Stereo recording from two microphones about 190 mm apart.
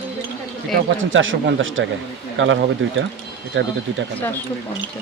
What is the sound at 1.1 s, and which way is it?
Speech, 90° right.